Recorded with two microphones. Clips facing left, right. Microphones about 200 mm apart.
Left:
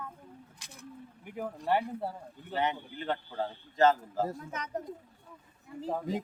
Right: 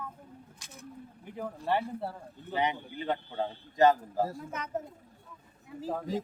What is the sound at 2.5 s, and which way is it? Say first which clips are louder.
Speech: right 1 dB; 15° right (ahead or behind).